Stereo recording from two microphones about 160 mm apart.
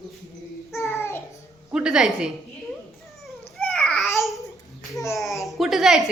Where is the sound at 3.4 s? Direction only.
5° left (ahead or behind).